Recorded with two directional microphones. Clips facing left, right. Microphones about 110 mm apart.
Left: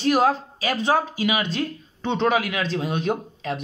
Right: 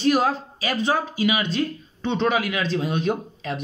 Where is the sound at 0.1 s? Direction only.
55° left (ahead or behind).